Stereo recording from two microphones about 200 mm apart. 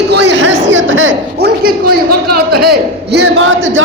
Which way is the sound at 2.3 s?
50° right (ahead or behind).